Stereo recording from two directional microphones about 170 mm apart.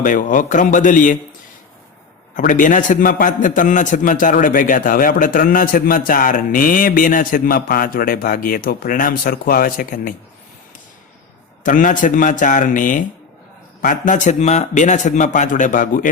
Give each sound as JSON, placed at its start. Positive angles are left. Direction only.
{"t": 0.0, "sound": "a man's voice", "side_deg": 50}
{"t": 2.3, "sound": "a man's voice", "side_deg": 50}
{"t": 11.6, "sound": "a man's voice", "side_deg": 50}